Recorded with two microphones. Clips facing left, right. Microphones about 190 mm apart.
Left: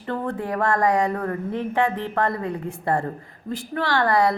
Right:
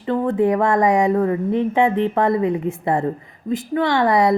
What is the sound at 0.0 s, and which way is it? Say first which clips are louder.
Speech: right 9 dB; 20° right (ahead or behind).